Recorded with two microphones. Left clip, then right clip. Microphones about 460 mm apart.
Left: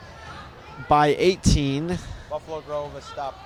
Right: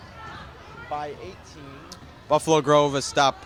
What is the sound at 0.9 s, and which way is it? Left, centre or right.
Speech, left.